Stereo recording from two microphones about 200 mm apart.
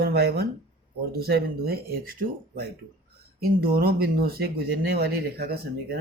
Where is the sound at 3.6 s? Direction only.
50° right (ahead or behind).